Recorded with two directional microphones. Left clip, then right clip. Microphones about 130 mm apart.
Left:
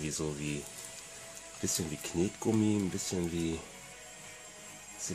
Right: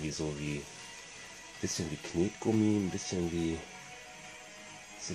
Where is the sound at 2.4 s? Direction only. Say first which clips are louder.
Right 1 dB; 15° right (ahead or behind).